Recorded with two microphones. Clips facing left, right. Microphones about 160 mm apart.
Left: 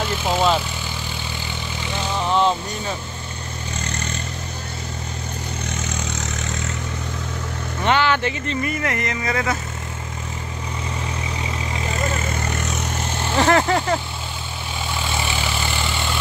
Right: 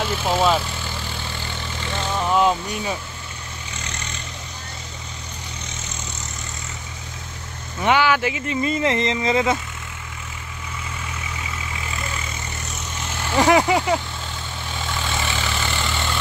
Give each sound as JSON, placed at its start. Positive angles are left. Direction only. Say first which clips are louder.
{"t": 0.0, "sound": "speech", "louder": "even", "side_deg": 0}
{"t": 1.9, "sound": "vehicle", "louder": "even", "side_deg": 0}
{"t": 3.8, "sound": "vehicle", "louder": "left 6 dB", "side_deg": 45}
{"t": 7.8, "sound": "speech", "louder": "right 1 dB", "side_deg": -10}
{"t": 8.6, "sound": "speech", "louder": "right 8 dB", "side_deg": -25}
{"t": 11.8, "sound": "vehicle", "louder": "left 9 dB", "side_deg": 45}
{"t": 13.4, "sound": "vehicle", "louder": "right 1 dB", "side_deg": -10}
{"t": 15.0, "sound": "vehicle", "louder": "left 1 dB", "side_deg": 15}